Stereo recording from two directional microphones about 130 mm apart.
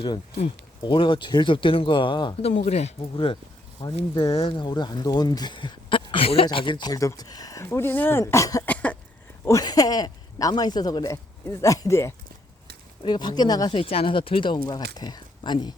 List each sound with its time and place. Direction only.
0.8 s speech: 40° left (ahead or behind)
2.4 s speech: 60° left (ahead or behind)
3.0 s speech: 40° left (ahead or behind)
4.3 s speech: 45° left (ahead or behind); by 8.6 s 25° left (ahead or behind)
8.6 s cough: 10° left (ahead or behind)
9.4 s speech: 25° left (ahead or behind)
13.0 s speech: 35° left (ahead or behind)
13.7 s speech: 45° left (ahead or behind)